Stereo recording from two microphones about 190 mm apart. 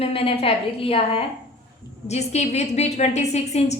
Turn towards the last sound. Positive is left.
turn(degrees=35)  # may be behind; listen again after turning